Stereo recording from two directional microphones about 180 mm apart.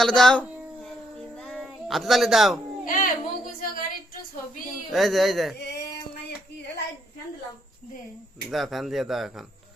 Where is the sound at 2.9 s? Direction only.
45° left (ahead or behind).